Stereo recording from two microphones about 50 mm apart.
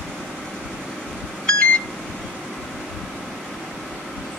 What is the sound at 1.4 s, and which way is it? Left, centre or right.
Beep, centre.